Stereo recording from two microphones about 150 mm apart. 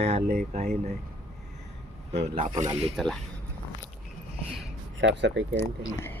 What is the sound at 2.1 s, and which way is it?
Speech, 45° right (ahead or behind).